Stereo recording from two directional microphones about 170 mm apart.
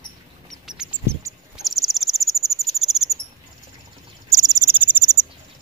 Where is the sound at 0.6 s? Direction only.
5° right (ahead or behind).